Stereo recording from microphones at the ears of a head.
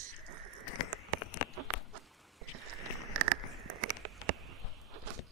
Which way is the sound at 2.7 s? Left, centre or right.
Right.